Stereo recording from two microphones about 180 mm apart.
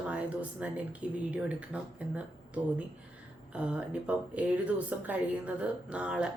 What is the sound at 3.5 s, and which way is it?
Speech, 5° right (ahead or behind).